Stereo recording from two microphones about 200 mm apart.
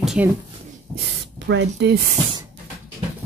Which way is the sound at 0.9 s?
60° right (ahead or behind).